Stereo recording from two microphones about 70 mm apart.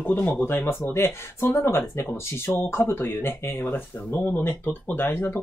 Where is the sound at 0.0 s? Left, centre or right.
Left.